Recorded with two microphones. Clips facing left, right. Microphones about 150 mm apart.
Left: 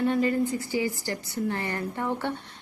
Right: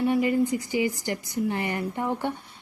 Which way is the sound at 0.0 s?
15° right (ahead or behind).